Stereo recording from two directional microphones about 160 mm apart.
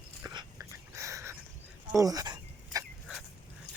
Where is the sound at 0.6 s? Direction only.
20° right (ahead or behind).